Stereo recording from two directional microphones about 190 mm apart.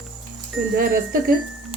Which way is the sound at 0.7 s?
50° right (ahead or behind).